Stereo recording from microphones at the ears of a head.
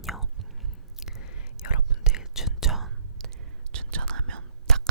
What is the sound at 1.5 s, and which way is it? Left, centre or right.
Whispering, left.